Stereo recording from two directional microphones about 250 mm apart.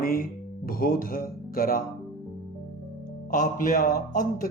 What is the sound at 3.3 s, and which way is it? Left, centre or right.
Speech, left.